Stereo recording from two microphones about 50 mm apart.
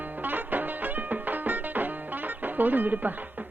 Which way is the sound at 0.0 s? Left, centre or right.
Right.